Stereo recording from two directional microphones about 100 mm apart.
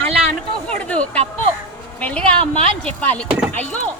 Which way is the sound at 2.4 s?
90° right.